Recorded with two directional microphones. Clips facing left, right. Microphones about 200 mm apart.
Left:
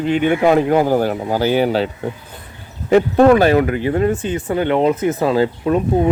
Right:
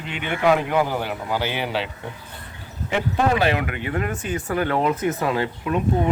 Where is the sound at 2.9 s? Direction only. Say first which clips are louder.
Left 11 dB; 45° left (ahead or behind).